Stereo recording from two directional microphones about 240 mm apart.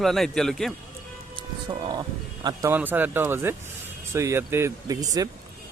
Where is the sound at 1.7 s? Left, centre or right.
Centre.